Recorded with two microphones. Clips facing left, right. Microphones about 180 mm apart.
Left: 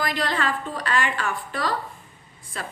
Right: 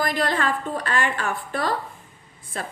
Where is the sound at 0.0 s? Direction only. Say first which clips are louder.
Right 2 dB; 50° right (ahead or behind).